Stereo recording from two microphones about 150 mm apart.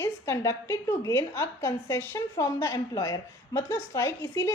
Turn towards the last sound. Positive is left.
turn(degrees=20)  # may be behind; listen again after turning